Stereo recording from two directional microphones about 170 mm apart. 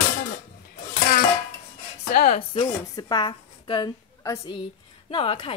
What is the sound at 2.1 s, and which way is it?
Speech, 60° left (ahead or behind).